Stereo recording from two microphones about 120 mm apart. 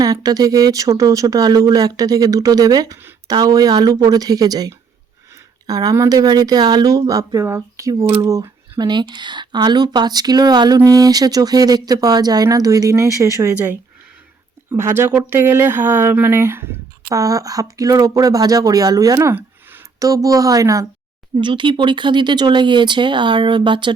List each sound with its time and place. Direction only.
0.0 s speech: 30° right (ahead or behind)
14.8 s speech: 20° right (ahead or behind)
20.0 s speech: 30° right (ahead or behind)
21.3 s speech: 40° right (ahead or behind)